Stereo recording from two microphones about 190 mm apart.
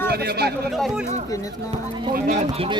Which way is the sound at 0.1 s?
55° right (ahead or behind).